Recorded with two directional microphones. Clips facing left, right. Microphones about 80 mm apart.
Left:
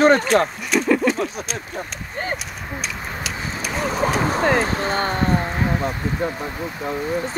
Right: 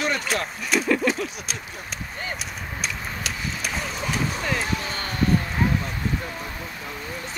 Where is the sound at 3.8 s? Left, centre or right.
Left.